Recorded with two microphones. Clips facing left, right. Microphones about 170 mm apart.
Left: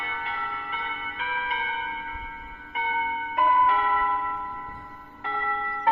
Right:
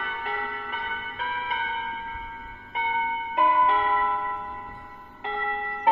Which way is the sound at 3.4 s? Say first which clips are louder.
Even; 25° right (ahead or behind).